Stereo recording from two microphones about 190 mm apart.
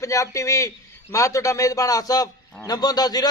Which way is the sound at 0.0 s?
15° left (ahead or behind).